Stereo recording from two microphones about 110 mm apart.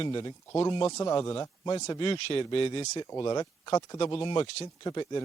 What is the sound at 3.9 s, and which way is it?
Speech, 50° left (ahead or behind).